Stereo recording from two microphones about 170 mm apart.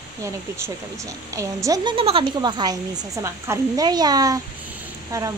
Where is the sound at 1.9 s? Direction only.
35° right (ahead or behind).